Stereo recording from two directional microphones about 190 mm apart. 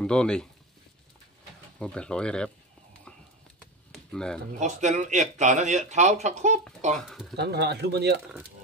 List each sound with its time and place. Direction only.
0.0 s speech: 5° left (ahead or behind)
1.8 s speech: 5° left (ahead or behind)
3.9 s a sound: 5° left (ahead or behind)
4.6 s speech: 40° right (ahead or behind)
7.0 s speech: centre (ahead or behind)
7.3 s speech: 60° right (ahead or behind)